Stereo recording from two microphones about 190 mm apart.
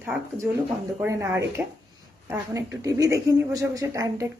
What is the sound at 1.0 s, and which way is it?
A woman's voice, 15° right (ahead or behind).